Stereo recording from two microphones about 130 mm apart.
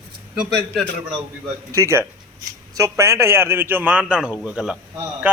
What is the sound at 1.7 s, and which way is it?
A man's voice, 20° right (ahead or behind).